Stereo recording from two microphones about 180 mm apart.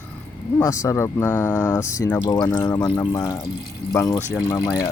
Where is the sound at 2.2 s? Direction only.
25° left (ahead or behind).